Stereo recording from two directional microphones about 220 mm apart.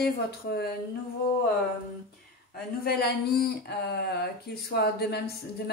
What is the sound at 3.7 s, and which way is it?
Speech, 50° left (ahead or behind).